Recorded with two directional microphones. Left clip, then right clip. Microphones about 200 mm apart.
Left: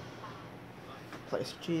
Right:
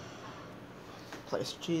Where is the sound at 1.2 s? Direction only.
Centre (ahead or behind).